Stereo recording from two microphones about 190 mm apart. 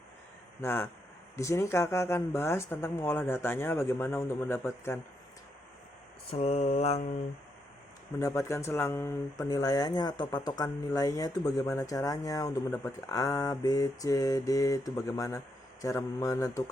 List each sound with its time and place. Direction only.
0.6 s speech: 10° left (ahead or behind)
6.3 s mantra: 35° left (ahead or behind)
8.2 s speech: 15° left (ahead or behind)